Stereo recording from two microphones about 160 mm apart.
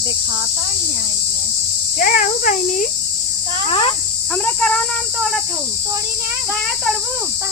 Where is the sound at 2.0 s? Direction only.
55° left (ahead or behind).